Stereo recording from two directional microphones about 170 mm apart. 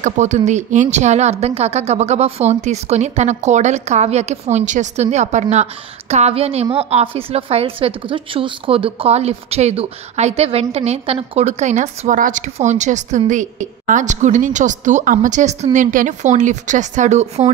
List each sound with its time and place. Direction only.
0.0 s a woman's voice: 45° right (ahead or behind)